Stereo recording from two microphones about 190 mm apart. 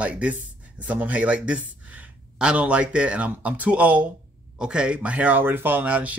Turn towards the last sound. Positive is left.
turn(degrees=-10)  # may be behind; listen again after turning